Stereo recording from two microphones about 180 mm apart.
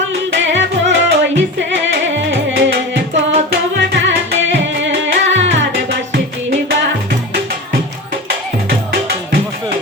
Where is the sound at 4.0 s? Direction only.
90° right.